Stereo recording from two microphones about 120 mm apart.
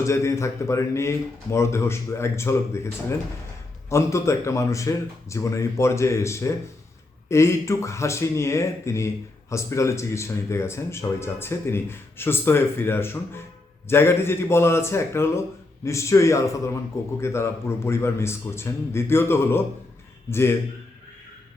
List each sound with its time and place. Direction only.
0.0 s speech: 25° left (ahead or behind)